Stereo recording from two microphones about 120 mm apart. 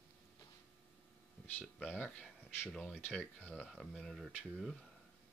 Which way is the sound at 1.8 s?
15° left (ahead or behind).